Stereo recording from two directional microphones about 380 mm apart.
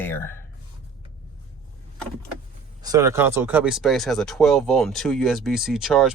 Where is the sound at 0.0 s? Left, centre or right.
Centre.